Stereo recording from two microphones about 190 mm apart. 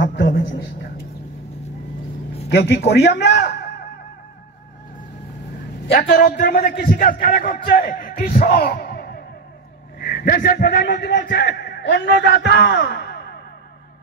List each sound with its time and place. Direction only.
0.0 s a man's voice: 65° left (ahead or behind)
2.5 s a man's voice: 55° left (ahead or behind)
5.9 s a man's voice: 45° left (ahead or behind)